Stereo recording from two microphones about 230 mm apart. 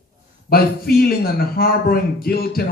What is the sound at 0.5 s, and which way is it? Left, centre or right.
Speech, left.